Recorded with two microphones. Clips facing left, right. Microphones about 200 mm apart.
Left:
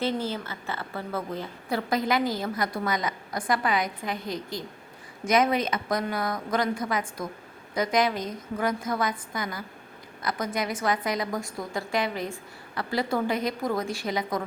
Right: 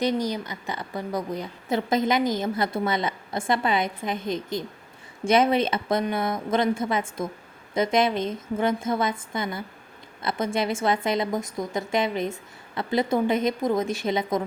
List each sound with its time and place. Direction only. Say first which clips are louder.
0.0 s a woman's voice: right 3 dB; 15° right (ahead or behind)